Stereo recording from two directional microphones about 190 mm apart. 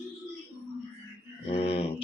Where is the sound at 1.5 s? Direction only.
30° left (ahead or behind).